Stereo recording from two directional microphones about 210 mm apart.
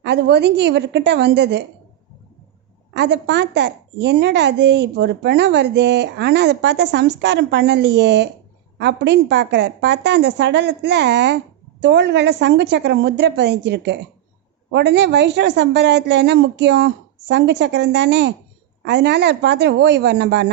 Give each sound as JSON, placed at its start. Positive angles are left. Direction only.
{"t": 0.0, "sound": "a woman's voice", "side_deg": -55}
{"t": 2.9, "sound": "a woman's voice", "side_deg": -55}